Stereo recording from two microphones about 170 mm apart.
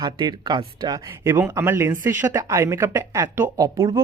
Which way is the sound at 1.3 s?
10° right (ahead or behind).